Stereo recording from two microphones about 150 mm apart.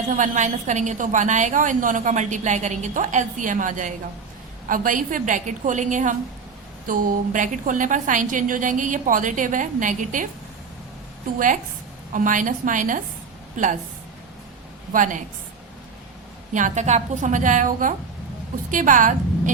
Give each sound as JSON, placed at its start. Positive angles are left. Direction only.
{"t": 0.2, "sound": "a woman's voice", "side_deg": -55}
{"t": 11.3, "sound": "a woman's voice", "side_deg": -60}
{"t": 14.9, "sound": "a woman's voice", "side_deg": -60}
{"t": 16.6, "sound": "a woman's voice", "side_deg": -55}